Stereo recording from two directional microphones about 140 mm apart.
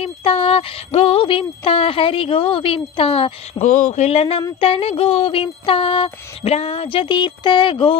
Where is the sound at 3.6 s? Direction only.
60° left (ahead or behind); by 7.9 s 35° left (ahead or behind).